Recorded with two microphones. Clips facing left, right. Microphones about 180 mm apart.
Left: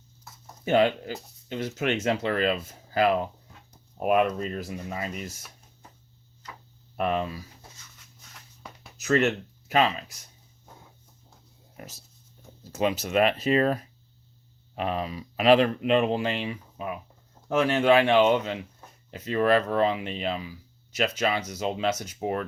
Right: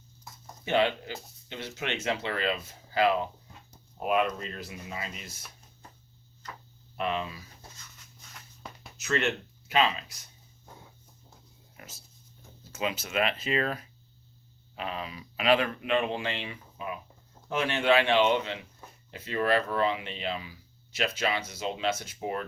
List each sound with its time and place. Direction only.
0.6 s speech: 45° left (ahead or behind)
6.9 s speech: 45° left (ahead or behind)
9.0 s speech: 40° left (ahead or behind)
11.8 s speech: 40° left (ahead or behind)